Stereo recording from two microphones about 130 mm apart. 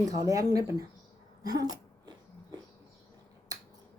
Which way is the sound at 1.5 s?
30° right (ahead or behind).